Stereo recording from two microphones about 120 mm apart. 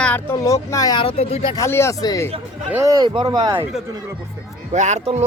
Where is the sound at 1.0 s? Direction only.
55° left (ahead or behind).